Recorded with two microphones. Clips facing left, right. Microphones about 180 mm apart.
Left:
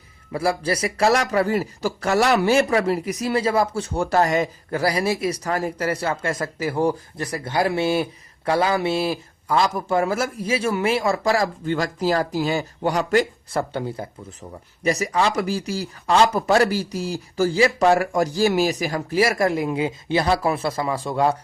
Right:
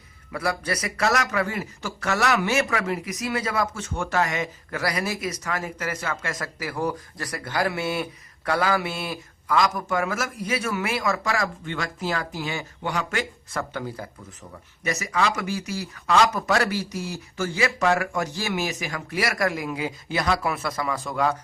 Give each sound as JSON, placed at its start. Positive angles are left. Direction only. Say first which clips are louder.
{"t": 0.3, "sound": "speech", "louder": "left 5 dB", "side_deg": 30}